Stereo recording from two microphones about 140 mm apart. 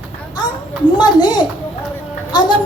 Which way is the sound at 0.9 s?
30° left (ahead or behind).